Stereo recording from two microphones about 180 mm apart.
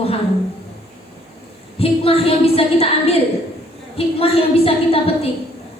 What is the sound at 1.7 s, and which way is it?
A woman's voice, 30° left (ahead or behind).